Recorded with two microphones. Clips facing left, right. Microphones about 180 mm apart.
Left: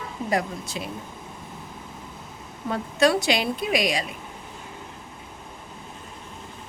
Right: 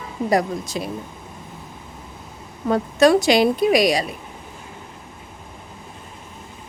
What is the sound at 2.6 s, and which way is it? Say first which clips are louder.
Speech: right 6 dB; 45° right (ahead or behind).